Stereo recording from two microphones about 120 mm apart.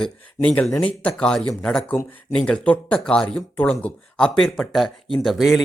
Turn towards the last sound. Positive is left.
turn(degrees=0)  # may be behind; listen again after turning